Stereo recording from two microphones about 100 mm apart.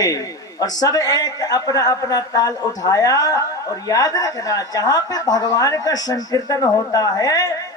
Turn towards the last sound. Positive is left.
turn(degrees=40)  # may be behind; listen again after turning